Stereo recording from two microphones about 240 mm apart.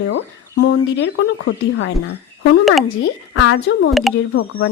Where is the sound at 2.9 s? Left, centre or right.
Left.